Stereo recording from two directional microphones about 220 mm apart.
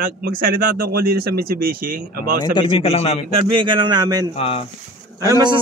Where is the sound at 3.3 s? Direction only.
20° right (ahead or behind).